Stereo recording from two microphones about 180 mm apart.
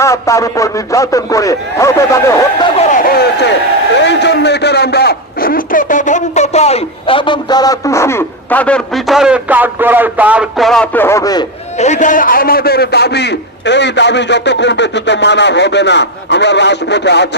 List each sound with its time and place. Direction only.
0.0 s a man's voice: 15° left (ahead or behind)
2.7 s a sound: 50° left (ahead or behind)
4.0 s a man's voice: 75° left (ahead or behind); by 11.4 s 20° left (ahead or behind)
11.8 s a man's voice: 40° left (ahead or behind); by 17.2 s 75° left (ahead or behind)